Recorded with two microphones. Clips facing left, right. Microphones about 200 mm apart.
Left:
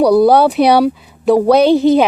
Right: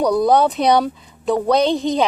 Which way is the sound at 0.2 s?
70° left (ahead or behind).